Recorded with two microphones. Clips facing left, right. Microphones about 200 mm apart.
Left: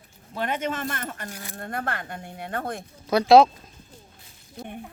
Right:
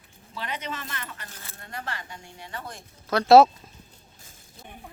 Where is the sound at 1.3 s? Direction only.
15° left (ahead or behind).